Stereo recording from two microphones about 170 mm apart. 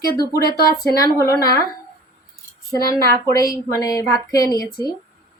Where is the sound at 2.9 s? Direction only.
20° left (ahead or behind).